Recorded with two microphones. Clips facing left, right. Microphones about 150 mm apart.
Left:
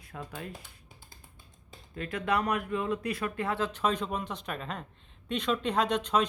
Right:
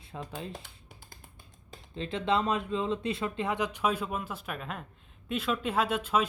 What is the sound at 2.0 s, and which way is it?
Speech, 25° right (ahead or behind).